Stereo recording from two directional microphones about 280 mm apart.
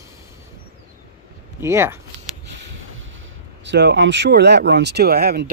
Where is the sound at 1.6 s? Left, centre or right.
Centre.